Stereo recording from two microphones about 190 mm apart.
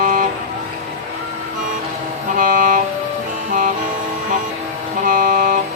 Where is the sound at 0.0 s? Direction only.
45° right (ahead or behind).